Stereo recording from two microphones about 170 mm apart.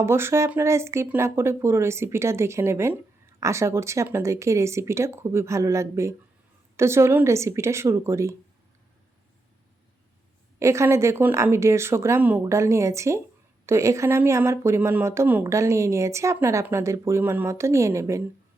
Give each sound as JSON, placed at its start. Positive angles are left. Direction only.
{"t": 0.0, "sound": "speech", "side_deg": -15}
{"t": 10.6, "sound": "speech", "side_deg": -15}